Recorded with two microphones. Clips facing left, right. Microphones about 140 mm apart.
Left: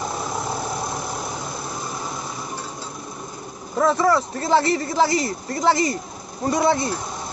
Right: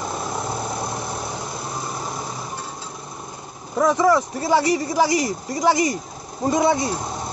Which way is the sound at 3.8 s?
15° right (ahead or behind).